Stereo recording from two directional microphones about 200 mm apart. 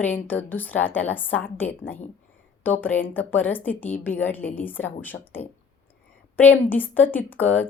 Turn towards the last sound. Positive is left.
turn(degrees=10)  # may be behind; listen again after turning